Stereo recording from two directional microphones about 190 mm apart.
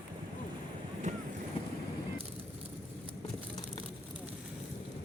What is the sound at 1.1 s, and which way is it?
Boat, 40° right (ahead or behind).